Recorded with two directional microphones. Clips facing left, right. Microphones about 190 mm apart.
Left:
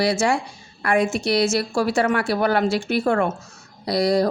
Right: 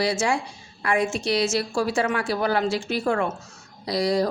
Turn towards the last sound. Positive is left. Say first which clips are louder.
# left 3 dB
turn(degrees=60)  # may be behind; listen again after turning